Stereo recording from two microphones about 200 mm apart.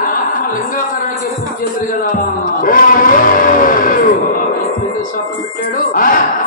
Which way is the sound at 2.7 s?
45° left (ahead or behind).